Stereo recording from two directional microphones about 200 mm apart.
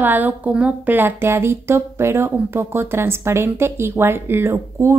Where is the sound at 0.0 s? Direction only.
10° right (ahead or behind).